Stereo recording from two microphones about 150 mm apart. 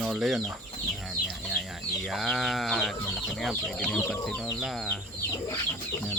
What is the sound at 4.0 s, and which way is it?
Speech, 15° left (ahead or behind).